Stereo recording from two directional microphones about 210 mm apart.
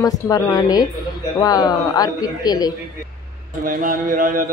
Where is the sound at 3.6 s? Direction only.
40° right (ahead or behind).